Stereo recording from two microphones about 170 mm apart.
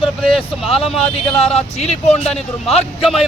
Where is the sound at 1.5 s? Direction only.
40° left (ahead or behind).